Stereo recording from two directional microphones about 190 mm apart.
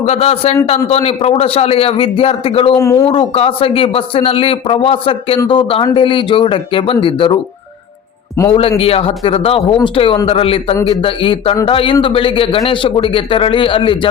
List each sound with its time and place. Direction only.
0.0 s a man's voice: 35° left (ahead or behind)
2.7 s a man's voice: 15° left (ahead or behind)
3.1 s a man's voice: 30° left (ahead or behind)
8.8 s a man's voice: 30° left (ahead or behind)